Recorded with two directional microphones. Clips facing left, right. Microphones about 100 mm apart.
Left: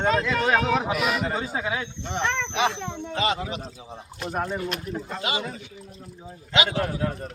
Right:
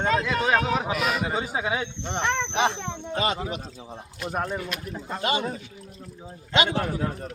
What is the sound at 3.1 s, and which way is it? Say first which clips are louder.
Speech: left 1 dB; 45° right (ahead or behind).